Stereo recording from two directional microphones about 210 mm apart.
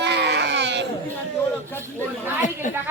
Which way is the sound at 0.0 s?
55° right (ahead or behind).